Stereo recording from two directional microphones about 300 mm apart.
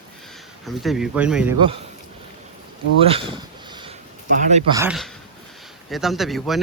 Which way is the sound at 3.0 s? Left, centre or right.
Centre.